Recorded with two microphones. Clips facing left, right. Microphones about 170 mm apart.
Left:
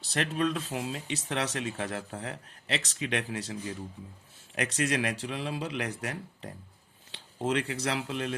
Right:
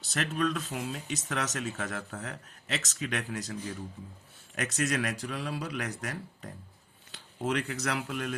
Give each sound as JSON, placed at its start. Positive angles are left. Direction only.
{"t": 0.0, "sound": "speech", "side_deg": 30}
{"t": 4.5, "sound": "speech", "side_deg": 30}